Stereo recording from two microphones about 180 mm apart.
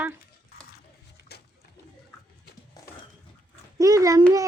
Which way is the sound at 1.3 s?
65° left (ahead or behind).